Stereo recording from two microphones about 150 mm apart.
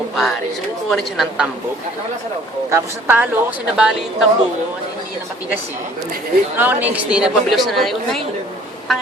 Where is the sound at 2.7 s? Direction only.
15° right (ahead or behind).